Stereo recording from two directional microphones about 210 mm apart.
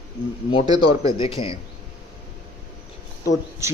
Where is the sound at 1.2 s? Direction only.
25° left (ahead or behind).